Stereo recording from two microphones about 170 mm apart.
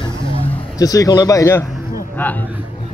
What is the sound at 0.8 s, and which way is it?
A man's voice, 20° left (ahead or behind).